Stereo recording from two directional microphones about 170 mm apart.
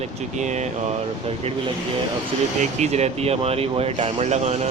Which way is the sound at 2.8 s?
40° right (ahead or behind).